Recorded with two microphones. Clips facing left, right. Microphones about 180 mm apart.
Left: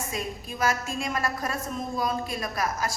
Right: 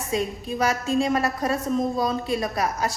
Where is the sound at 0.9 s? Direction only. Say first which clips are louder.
Right 7 dB; 35° right (ahead or behind).